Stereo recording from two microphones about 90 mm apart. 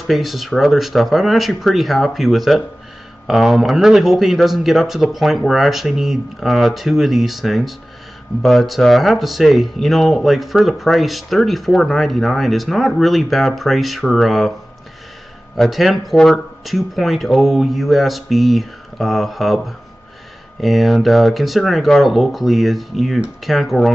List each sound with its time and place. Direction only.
0.0 s speech: centre (ahead or behind)
15.5 s speech: centre (ahead or behind)